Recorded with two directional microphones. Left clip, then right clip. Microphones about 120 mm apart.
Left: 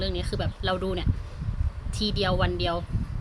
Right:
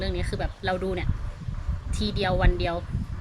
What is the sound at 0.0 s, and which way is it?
Speech, 20° left (ahead or behind).